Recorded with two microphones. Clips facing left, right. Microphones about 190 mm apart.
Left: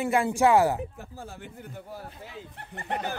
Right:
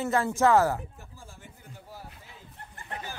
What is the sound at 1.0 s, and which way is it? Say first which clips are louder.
Speech: left 8 dB; 65° left (ahead or behind).